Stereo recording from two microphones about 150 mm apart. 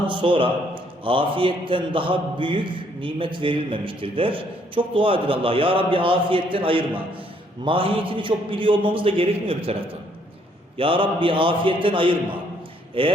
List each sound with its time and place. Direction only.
0.1 s a man's voice: 35° right (ahead or behind)